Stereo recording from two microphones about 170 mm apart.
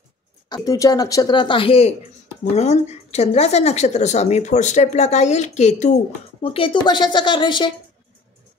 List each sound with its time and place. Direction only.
0.7 s a woman's voice: 20° left (ahead or behind); by 5.9 s 40° left (ahead or behind)
6.4 s speech: 30° left (ahead or behind)